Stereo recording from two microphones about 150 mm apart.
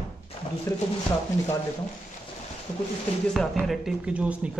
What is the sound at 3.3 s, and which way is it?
Speech, centre (ahead or behind).